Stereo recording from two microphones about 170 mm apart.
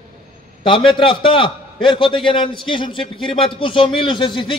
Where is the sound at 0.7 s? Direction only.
30° left (ahead or behind).